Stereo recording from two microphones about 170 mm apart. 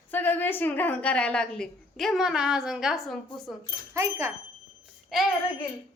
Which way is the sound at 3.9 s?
15° right (ahead or behind).